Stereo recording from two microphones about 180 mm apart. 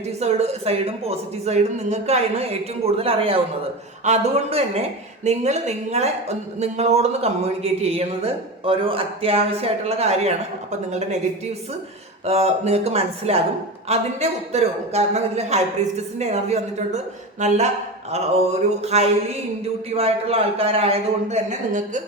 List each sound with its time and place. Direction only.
0.2 s a woman's voice: 35° right (ahead or behind)
12.2 s a woman's voice: 35° right (ahead or behind)
18.8 s a woman's voice: 35° right (ahead or behind)